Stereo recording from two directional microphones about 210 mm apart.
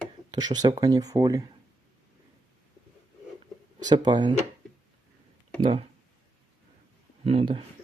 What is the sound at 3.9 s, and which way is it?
Speech, 20° right (ahead or behind).